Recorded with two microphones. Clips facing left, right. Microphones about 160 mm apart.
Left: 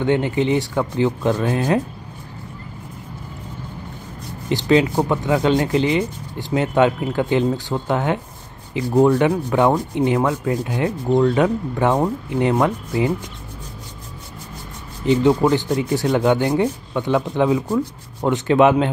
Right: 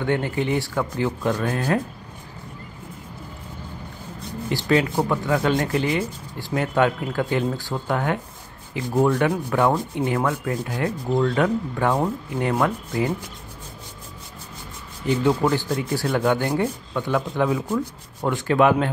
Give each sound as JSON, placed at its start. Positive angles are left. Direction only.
{"t": 0.0, "sound": "speech", "side_deg": 20}
{"t": 4.6, "sound": "speech", "side_deg": 20}
{"t": 15.2, "sound": "speech", "side_deg": 20}